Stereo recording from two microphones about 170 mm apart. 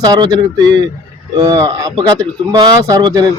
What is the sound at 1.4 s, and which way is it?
Speech, 20° right (ahead or behind).